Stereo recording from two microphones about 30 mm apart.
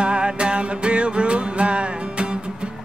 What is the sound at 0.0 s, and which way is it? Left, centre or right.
Music, right.